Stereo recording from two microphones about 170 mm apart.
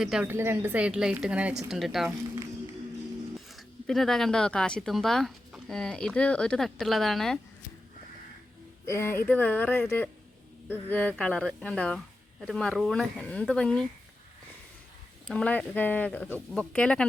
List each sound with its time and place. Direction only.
0.0 s speech: 5° right (ahead or behind)
0.3 s a woman's voice: 15° right (ahead or behind)
2.0 s speech: 20° right (ahead or behind)
3.3 s speech: centre (ahead or behind)
8.9 s speech: 15° left (ahead or behind)
10.8 s speech: 10° left (ahead or behind)
15.3 s speech: 5° left (ahead or behind)